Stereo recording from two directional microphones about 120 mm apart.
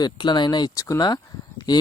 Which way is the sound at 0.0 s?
40° left (ahead or behind).